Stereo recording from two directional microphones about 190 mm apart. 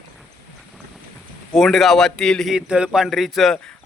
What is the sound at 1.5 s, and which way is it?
A man's voice, centre (ahead or behind).